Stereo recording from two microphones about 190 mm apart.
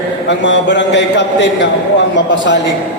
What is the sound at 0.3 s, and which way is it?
A man's voice, 70° left (ahead or behind).